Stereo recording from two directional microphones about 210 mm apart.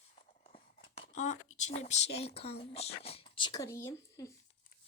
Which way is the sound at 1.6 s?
30° left (ahead or behind).